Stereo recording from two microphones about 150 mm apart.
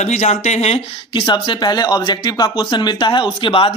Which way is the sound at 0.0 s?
50° left (ahead or behind).